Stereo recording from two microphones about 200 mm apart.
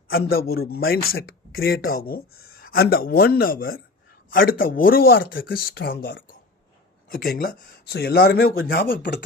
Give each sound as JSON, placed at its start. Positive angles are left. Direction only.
{"t": 0.1, "sound": "speech", "side_deg": 50}